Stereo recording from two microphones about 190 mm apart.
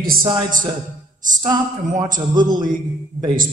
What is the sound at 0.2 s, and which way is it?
Speech, 25° right (ahead or behind).